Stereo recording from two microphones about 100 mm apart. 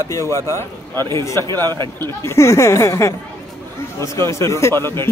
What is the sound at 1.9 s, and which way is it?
Speech, 25° left (ahead or behind).